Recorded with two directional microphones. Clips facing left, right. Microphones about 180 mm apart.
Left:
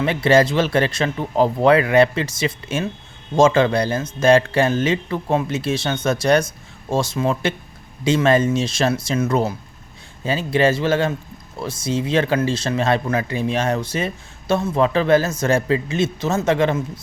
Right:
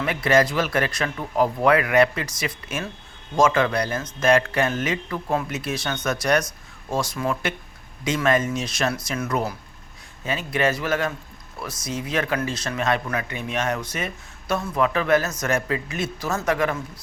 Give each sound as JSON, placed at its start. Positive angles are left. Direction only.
{"t": 0.0, "sound": "speech", "side_deg": 30}